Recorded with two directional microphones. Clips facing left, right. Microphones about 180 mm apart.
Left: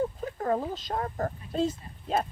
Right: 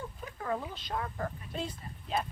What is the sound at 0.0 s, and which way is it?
Speech, 40° left (ahead or behind).